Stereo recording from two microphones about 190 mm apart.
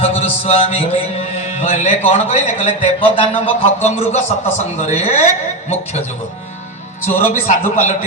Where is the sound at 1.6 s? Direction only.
35° left (ahead or behind).